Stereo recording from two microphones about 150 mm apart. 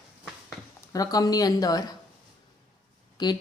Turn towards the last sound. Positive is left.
turn(degrees=25)  # may be behind; listen again after turning